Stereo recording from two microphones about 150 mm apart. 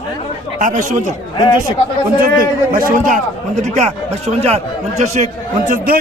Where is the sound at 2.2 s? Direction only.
70° right (ahead or behind).